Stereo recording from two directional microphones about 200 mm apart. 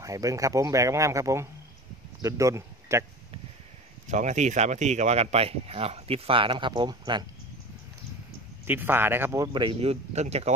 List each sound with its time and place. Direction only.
0.0 s speech: 15° right (ahead or behind)
4.1 s speech: 35° right (ahead or behind)
8.6 s speech: 10° right (ahead or behind); by 10.5 s 35° right (ahead or behind)